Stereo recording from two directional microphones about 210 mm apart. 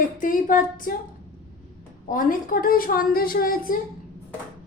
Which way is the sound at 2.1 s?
40° left (ahead or behind).